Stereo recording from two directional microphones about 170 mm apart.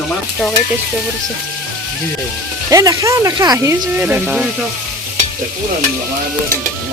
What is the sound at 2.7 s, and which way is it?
Speech, 20° right (ahead or behind).